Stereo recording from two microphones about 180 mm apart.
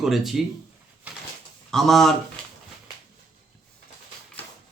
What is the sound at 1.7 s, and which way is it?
Speech, centre (ahead or behind).